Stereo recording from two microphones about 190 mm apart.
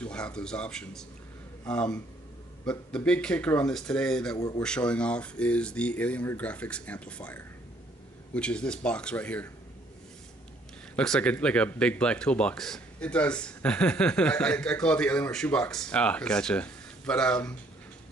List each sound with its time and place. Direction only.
0.0 s speech: 5° left (ahead or behind)
4.4 s speech: 20° left (ahead or behind)
4.6 s speech: 5° left (ahead or behind)
11.0 s speech: 5° left (ahead or behind)